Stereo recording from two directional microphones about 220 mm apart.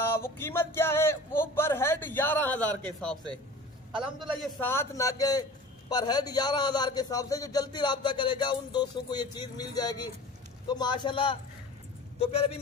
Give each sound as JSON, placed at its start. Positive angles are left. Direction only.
{"t": 0.0, "sound": "speech", "side_deg": 10}
{"t": 4.6, "sound": "a man's voice", "side_deg": 10}